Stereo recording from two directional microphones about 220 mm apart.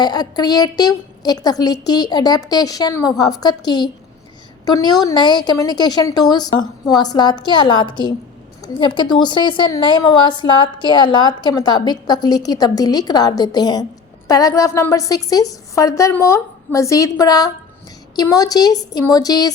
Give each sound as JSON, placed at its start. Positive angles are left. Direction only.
{"t": 0.0, "sound": "a woman's voice", "side_deg": 20}